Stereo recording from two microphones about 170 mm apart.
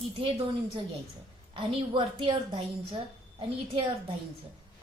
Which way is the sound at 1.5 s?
30° right (ahead or behind).